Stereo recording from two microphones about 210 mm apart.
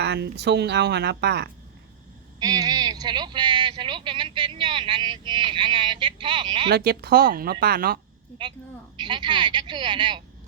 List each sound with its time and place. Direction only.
0.0 s speech: 55° right (ahead or behind)
2.4 s speech: 20° right (ahead or behind)
6.7 s speech: 45° right (ahead or behind)
9.0 s speech: 20° right (ahead or behind)